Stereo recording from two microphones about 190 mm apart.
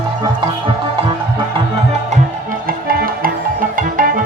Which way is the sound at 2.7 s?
50° right (ahead or behind).